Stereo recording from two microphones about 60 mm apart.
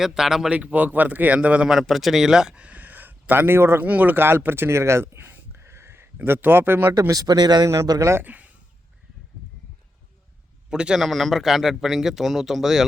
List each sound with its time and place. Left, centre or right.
0.0 s a man's voice: centre
0.5 s a man's voice: right
1.8 s a man's voice: centre
2.6 s a sound: right
3.8 s a sound: right
6.2 s a man's voice: right
7.1 s speech: right
7.8 s speech: right
8.2 s speech: right
10.7 s a man's voice: centre